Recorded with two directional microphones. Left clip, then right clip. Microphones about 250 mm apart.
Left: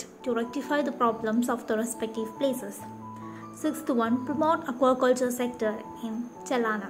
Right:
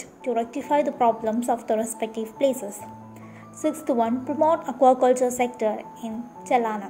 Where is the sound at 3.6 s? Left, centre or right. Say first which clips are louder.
Right 5 dB; centre.